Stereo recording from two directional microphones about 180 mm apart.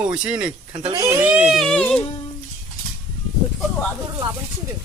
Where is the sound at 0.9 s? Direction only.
20° right (ahead or behind).